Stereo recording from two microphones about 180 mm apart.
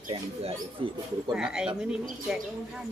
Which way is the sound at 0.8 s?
30° right (ahead or behind).